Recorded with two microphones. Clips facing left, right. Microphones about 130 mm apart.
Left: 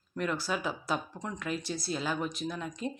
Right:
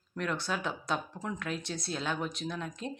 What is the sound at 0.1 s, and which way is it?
Speech, 5° left (ahead or behind).